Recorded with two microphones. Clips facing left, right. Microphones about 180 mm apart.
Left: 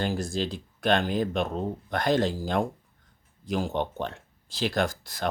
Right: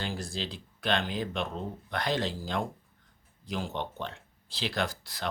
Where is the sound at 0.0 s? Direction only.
45° left (ahead or behind).